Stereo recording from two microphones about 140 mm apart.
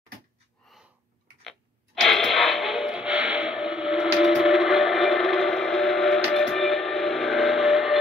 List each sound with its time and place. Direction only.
1.4 s music: centre (ahead or behind)